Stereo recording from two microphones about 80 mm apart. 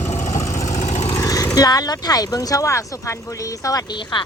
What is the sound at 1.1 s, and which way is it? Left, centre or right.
Vehicle, left.